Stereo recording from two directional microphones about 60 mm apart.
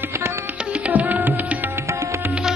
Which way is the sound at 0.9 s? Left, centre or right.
Right.